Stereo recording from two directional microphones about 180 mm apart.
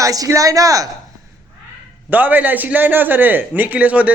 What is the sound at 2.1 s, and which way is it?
A man's voice, 10° right (ahead or behind).